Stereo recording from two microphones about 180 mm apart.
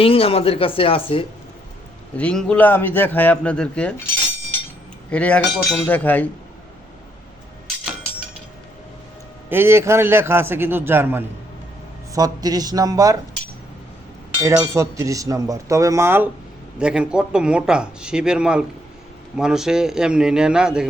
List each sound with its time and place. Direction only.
0.0 s speech: 30° left (ahead or behind)
2.1 s a man's voice: 5° left (ahead or behind)
5.1 s a man's voice: 5° left (ahead or behind)
9.5 s speech: 15° right (ahead or behind)
14.4 s a man's voice: 15° right (ahead or behind)